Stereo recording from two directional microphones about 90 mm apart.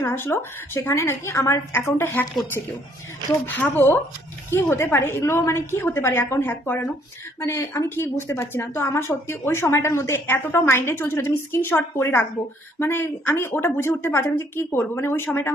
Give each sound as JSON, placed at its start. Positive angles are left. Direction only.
{"t": 0.0, "sound": "a woman's voice", "side_deg": 25}
{"t": 3.4, "sound": "a woman's voice", "side_deg": 25}